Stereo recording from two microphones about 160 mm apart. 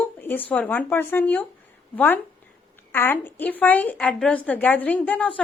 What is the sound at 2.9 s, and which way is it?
A woman's voice, 15° left (ahead or behind).